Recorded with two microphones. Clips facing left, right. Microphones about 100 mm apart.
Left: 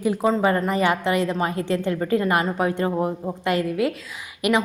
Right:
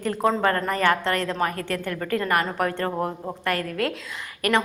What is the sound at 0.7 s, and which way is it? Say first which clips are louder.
A woman's voice: left 1 dB; 15° left (ahead or behind).